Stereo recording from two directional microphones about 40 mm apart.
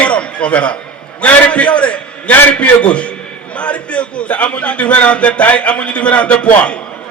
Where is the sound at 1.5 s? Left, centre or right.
Left.